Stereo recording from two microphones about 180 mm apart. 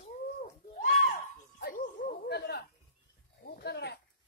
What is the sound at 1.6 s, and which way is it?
Dog, 55° left (ahead or behind).